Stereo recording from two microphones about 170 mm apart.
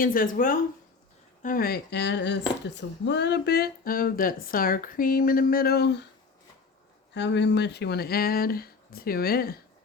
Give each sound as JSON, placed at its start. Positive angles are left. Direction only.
{"t": 0.0, "sound": "speech", "side_deg": 55}
{"t": 7.1, "sound": "speech", "side_deg": 90}